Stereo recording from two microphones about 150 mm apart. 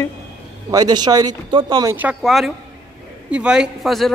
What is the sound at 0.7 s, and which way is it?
Speech, 25° right (ahead or behind).